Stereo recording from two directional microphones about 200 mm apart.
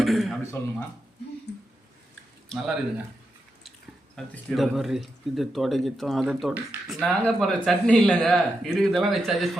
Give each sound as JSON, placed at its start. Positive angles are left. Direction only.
{"t": 0.0, "sound": "speech", "side_deg": 0}
{"t": 1.5, "sound": "a sound", "side_deg": 60}
{"t": 2.5, "sound": "speech", "side_deg": 0}
{"t": 4.1, "sound": "speech", "side_deg": 5}